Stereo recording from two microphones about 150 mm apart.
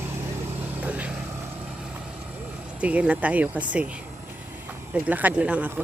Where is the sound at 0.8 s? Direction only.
10° right (ahead or behind).